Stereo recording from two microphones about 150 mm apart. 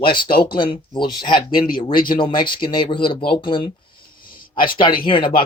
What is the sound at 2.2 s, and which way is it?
Speech, 35° left (ahead or behind).